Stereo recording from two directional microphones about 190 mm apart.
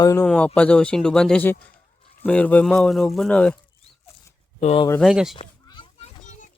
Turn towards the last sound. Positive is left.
turn(degrees=40)  # may be behind; listen again after turning